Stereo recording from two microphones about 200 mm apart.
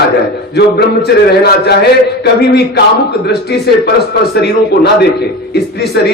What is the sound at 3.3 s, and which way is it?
A man's voice, 55° left (ahead or behind).